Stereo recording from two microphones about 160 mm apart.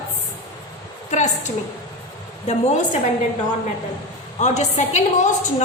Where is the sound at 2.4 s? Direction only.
45° left (ahead or behind).